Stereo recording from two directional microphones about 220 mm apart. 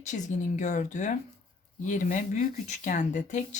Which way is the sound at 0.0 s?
35° left (ahead or behind).